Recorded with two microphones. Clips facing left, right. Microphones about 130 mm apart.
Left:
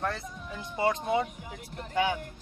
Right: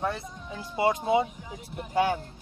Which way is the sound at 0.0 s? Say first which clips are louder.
Right 2 dB; 15° right (ahead or behind).